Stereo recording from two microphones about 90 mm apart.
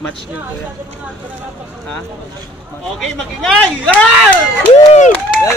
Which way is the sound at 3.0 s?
5° left (ahead or behind).